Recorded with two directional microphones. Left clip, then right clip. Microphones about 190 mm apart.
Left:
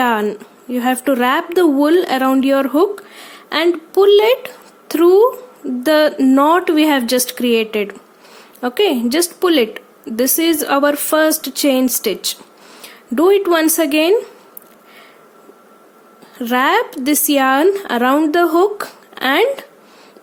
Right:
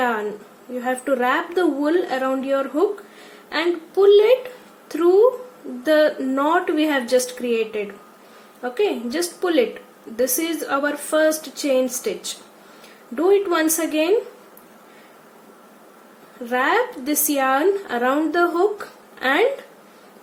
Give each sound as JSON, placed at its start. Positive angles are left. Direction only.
{"t": 0.0, "sound": "a sound", "side_deg": 55}
{"t": 0.8, "sound": "speech", "side_deg": 55}
{"t": 13.1, "sound": "speech", "side_deg": 55}
{"t": 16.5, "sound": "speech", "side_deg": 55}